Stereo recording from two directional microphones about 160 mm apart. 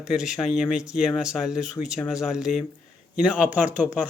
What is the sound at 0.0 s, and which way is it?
A man's voice, 5° right (ahead or behind).